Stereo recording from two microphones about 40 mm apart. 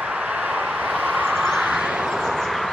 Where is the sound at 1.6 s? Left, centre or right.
Right.